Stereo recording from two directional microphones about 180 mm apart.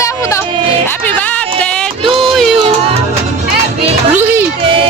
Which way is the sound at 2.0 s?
30° right (ahead or behind).